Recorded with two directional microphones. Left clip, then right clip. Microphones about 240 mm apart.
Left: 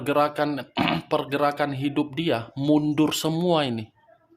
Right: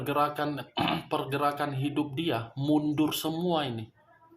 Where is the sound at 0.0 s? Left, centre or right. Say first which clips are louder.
Left 6 dB; left.